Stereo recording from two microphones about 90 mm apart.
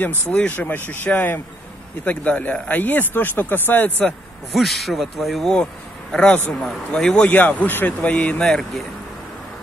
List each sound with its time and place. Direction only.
0.3 s speech: 15° left (ahead or behind)
4.0 s speech: centre (ahead or behind)
8.4 s speech: 5° left (ahead or behind)